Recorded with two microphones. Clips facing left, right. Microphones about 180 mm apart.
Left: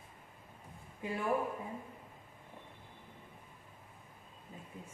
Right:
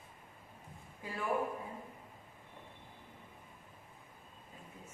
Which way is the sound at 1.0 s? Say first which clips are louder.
Left 6 dB; 20° left (ahead or behind).